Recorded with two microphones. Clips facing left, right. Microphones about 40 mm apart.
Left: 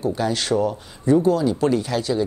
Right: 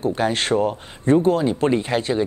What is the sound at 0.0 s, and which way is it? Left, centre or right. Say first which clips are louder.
Speech: right 2 dB; right.